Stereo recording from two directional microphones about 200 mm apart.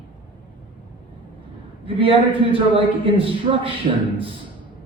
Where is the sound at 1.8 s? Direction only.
25° right (ahead or behind).